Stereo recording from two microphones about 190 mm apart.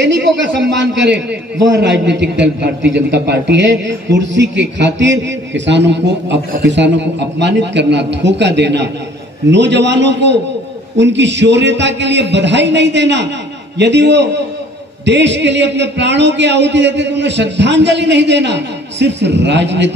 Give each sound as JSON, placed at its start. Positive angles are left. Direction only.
{"t": 0.0, "sound": "a man's voice", "side_deg": -70}